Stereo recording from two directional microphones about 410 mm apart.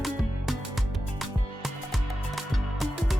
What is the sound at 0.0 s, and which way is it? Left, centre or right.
Music, centre.